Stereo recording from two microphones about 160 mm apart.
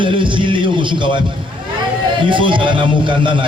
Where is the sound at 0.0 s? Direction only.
30° right (ahead or behind).